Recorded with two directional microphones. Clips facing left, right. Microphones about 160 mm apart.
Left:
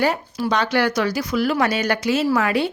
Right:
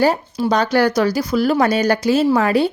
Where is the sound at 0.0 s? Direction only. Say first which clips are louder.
Right 4 dB; 35° right (ahead or behind).